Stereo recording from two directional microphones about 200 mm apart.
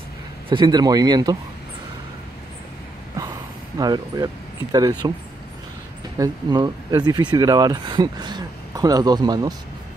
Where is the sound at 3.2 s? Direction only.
15° right (ahead or behind).